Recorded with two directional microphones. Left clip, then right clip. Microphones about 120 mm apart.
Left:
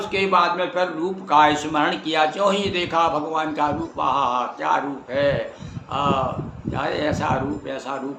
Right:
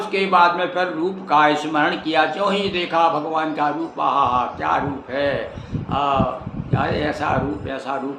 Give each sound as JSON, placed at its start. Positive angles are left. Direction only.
{"t": 0.1, "sound": "a man's voice", "side_deg": 25}